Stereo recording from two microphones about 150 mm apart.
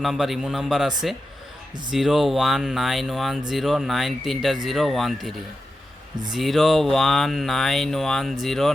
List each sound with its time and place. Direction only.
0.0 s speech: centre (ahead or behind)
6.3 s speech: centre (ahead or behind)